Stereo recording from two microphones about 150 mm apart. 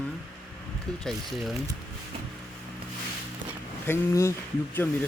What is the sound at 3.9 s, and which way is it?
Speech, 20° left (ahead or behind).